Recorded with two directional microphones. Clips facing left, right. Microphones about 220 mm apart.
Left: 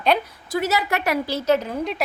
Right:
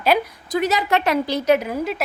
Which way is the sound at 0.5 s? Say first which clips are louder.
Right 3 dB; 20° right (ahead or behind).